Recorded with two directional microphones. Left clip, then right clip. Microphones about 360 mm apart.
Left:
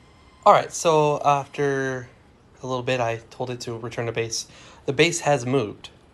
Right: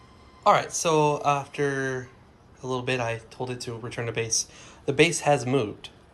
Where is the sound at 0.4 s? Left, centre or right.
Centre.